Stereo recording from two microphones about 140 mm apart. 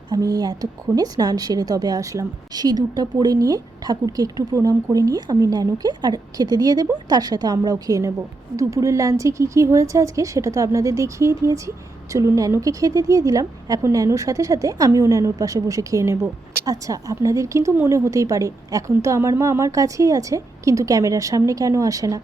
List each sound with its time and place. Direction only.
0.1 s a woman's voice: 25° right (ahead or behind)